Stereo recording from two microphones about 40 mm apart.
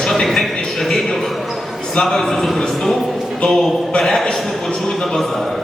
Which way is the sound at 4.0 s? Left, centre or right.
Centre.